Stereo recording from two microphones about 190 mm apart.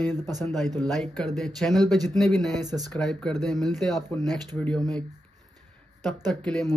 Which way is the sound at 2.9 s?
Centre (ahead or behind).